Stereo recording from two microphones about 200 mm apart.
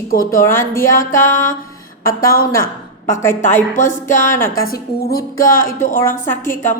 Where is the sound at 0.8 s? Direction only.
45° left (ahead or behind).